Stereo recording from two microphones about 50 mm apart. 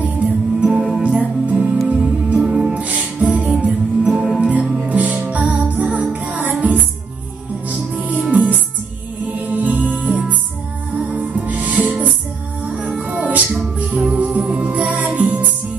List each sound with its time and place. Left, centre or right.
0.0 s music: right